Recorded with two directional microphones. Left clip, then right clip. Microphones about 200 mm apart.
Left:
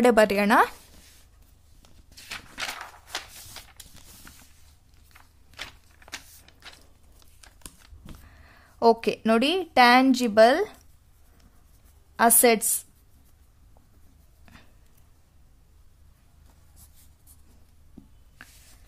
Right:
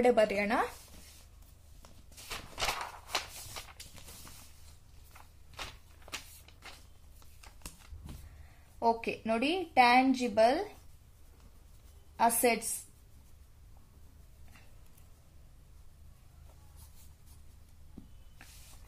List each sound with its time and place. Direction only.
0.0 s speech: 45° left (ahead or behind)
2.8 s walk: centre (ahead or behind)
8.7 s a woman's voice: 60° left (ahead or behind)
12.2 s speech: 55° left (ahead or behind)